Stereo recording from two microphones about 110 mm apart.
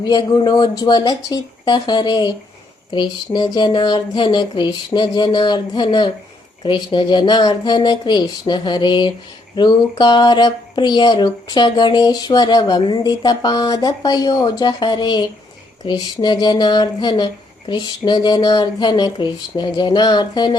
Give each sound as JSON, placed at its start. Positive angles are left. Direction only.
{"t": 0.0, "sound": "speech", "side_deg": 40}